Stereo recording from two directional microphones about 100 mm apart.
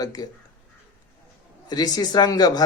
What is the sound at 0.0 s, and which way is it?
Speech, 40° left (ahead or behind).